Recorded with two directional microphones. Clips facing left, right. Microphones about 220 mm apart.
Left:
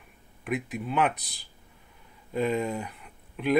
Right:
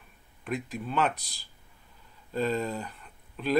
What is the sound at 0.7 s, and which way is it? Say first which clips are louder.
Speech: left 2 dB; 10° left (ahead or behind).